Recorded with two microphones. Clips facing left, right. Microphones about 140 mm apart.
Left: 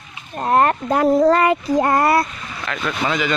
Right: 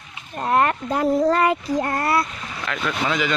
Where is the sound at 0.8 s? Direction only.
65° left (ahead or behind); by 2.1 s 90° left.